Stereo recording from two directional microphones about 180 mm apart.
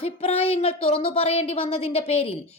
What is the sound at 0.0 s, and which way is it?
Speech, 35° left (ahead or behind).